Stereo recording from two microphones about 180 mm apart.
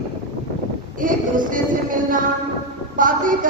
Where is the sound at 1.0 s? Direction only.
50° right (ahead or behind).